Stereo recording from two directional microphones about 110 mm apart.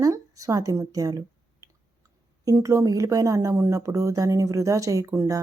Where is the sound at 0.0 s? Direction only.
30° right (ahead or behind).